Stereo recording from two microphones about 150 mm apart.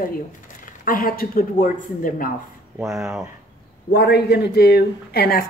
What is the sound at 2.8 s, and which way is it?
Speech, 5° right (ahead or behind).